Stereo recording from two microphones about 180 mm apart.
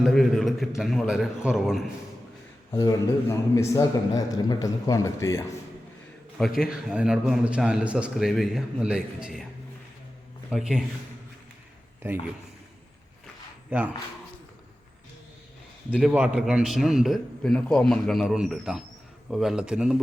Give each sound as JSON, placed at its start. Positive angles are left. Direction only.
{"t": 0.0, "sound": "a man's voice", "side_deg": 0}
{"t": 2.7, "sound": "a man's voice", "side_deg": 20}
{"t": 6.3, "sound": "a man's voice", "side_deg": 0}
{"t": 10.5, "sound": "a man's voice", "side_deg": 0}
{"t": 13.7, "sound": "speech", "side_deg": -10}
{"t": 15.9, "sound": "a man's voice", "side_deg": -5}